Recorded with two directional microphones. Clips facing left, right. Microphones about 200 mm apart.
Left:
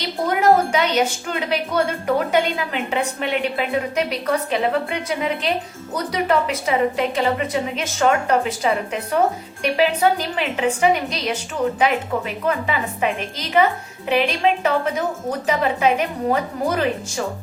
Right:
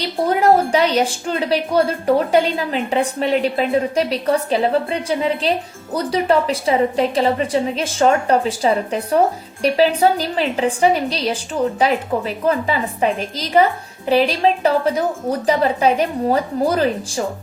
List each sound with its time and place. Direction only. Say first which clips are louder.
0.0 s a woman's voice: right 2 dB; 35° right (ahead or behind)